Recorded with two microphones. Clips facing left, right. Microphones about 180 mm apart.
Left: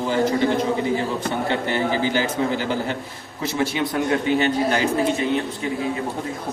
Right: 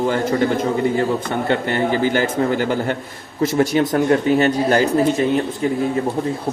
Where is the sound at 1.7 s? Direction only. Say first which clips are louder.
Right 3 dB; 55° right (ahead or behind).